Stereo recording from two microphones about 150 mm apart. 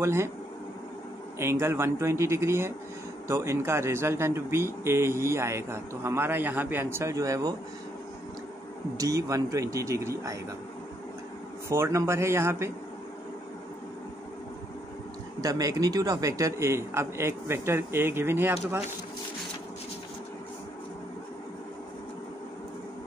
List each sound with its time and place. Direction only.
0.0 s a man's voice: 15° right (ahead or behind)
1.4 s a man's voice: 15° right (ahead or behind)
8.9 s a man's voice: 20° right (ahead or behind)
11.7 s a man's voice: 20° right (ahead or behind)
15.4 s a man's voice: 25° right (ahead or behind)